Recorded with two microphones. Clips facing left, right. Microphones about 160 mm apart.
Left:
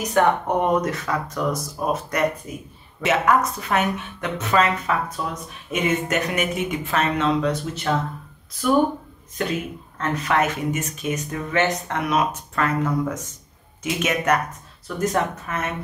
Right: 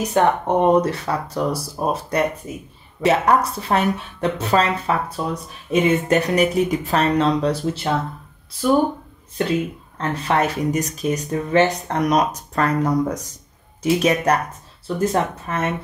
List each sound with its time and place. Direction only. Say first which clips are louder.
0.1 s speech: right 1 dB; 30° right (ahead or behind)
9.9 s speech: right 1 dB; 30° right (ahead or behind)